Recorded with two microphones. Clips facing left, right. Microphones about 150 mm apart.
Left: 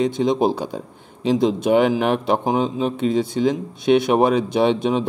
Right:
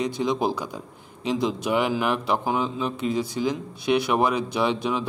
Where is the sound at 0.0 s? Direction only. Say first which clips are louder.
Left 6 dB; 25° left (ahead or behind).